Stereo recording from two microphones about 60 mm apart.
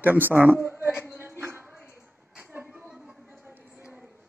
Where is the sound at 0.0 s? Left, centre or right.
Right.